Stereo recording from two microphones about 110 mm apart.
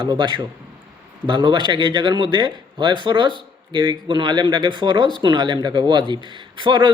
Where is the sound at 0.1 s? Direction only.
40° right (ahead or behind).